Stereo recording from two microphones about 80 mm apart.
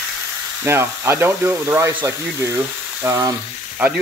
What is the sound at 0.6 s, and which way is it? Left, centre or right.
Speech, right.